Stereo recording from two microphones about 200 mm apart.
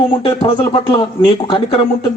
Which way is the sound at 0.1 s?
25° left (ahead or behind).